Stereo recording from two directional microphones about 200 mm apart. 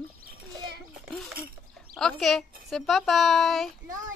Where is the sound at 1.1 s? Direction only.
Centre (ahead or behind).